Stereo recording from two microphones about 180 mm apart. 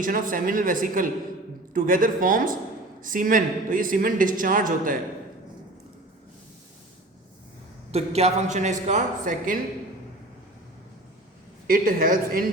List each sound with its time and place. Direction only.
0.0 s a woman's voice: 50° right (ahead or behind)
7.9 s a man's voice: 35° right (ahead or behind)
11.7 s a woman's voice: 50° right (ahead or behind)